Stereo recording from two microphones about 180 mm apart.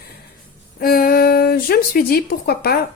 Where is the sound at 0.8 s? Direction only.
55° left (ahead or behind).